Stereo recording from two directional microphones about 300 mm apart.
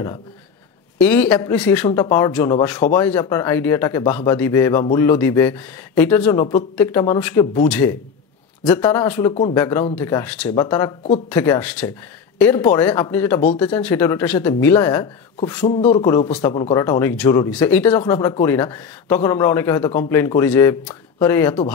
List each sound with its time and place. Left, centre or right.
0.9 s speech: centre
9.3 s speech: centre
9.6 s speech: centre
16.3 s speech: centre